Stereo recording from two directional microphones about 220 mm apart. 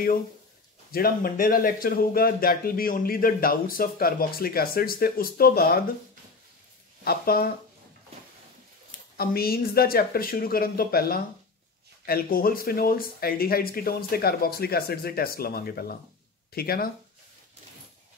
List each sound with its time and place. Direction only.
0.9 s speech: 40° left (ahead or behind)
7.1 s speech: 45° left (ahead or behind)
9.1 s speech: 45° left (ahead or behind)